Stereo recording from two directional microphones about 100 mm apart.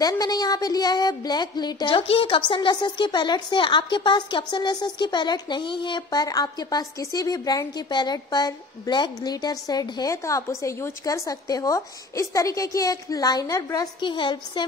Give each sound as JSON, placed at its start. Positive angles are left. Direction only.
{"t": 0.0, "sound": "speech", "side_deg": 40}
{"t": 14.0, "sound": "speech", "side_deg": 50}